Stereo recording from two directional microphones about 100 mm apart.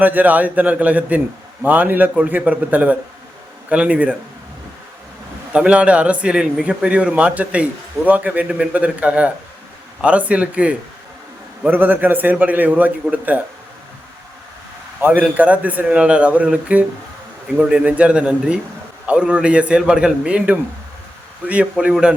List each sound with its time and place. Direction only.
0.0 s a man's voice: 15° right (ahead or behind)
5.5 s a man's voice: 10° right (ahead or behind)
15.0 s a man's voice: 15° right (ahead or behind)